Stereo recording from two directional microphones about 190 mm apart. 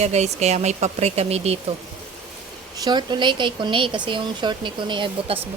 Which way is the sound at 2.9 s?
25° right (ahead or behind).